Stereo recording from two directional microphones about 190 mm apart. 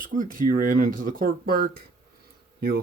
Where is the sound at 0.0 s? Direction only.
45° right (ahead or behind).